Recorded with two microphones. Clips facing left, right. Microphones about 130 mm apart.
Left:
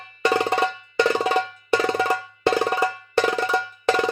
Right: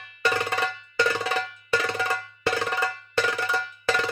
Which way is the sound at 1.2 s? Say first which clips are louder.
Left 6 dB; 20° left (ahead or behind).